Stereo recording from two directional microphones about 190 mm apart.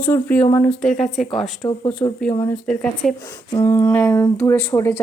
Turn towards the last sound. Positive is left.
turn(degrees=15)  # may be behind; listen again after turning